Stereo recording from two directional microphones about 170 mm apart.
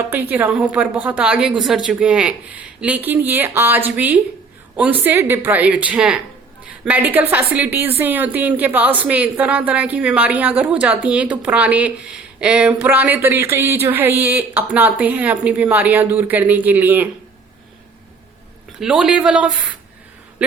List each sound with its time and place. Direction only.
0.1 s a woman's voice: 10° right (ahead or behind)
18.8 s speech: 5° right (ahead or behind)